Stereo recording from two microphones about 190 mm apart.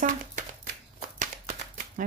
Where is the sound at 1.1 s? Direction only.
40° right (ahead or behind).